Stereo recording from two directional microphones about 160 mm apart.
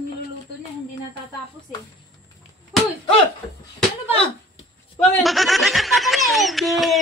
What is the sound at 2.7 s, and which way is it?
Cough, centre (ahead or behind).